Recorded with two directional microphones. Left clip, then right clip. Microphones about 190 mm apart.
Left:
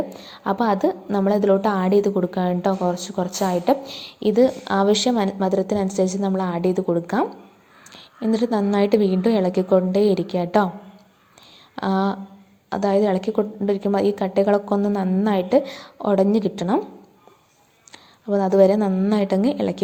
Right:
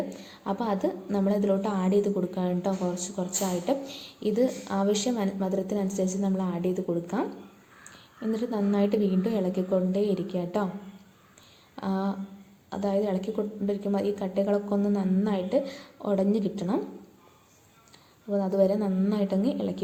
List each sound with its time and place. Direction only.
0.2 s a woman's voice: 25° left (ahead or behind)
11.8 s a woman's voice: 30° left (ahead or behind)
17.9 s a woman's voice: 30° left (ahead or behind)